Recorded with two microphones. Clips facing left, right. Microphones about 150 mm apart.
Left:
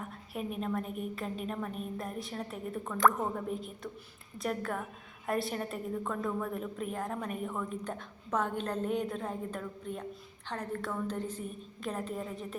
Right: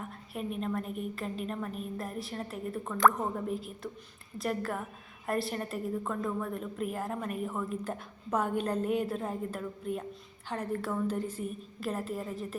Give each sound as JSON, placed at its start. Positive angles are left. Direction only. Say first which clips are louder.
{"t": 0.0, "sound": "a woman's voice", "louder": "right 1 dB", "side_deg": 0}